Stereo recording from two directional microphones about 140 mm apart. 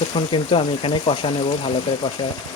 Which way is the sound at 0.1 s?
40° left (ahead or behind).